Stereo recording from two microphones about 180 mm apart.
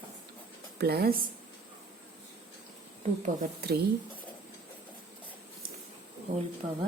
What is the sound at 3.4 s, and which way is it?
Speech, 60° right (ahead or behind).